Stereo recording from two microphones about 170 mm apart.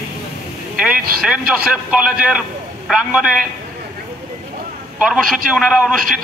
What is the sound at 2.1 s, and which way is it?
A man's voice, 5° right (ahead or behind).